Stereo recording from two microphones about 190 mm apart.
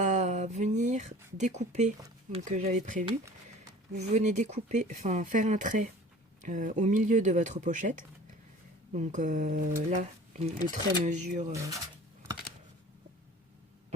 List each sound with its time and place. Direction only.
0.0 s a sound: 40° right (ahead or behind)
2.3 s speech: 35° right (ahead or behind)
3.1 s speech: 15° right (ahead or behind)
3.9 s speech: 35° right (ahead or behind)
11.5 s speech: 15° right (ahead or behind)